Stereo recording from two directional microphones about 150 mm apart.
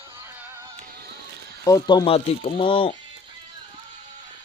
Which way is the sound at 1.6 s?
25° left (ahead or behind).